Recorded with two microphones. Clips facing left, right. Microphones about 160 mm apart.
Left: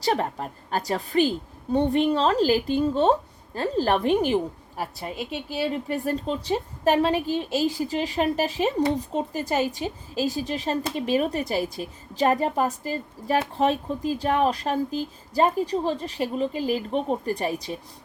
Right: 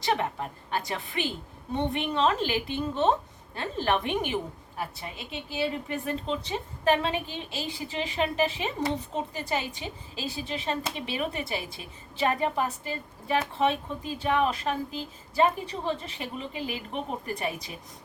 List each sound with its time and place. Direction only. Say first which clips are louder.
0.0 s speech: left 3 dB; 35° left (ahead or behind)